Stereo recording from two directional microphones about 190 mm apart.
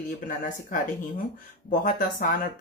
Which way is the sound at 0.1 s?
45° left (ahead or behind).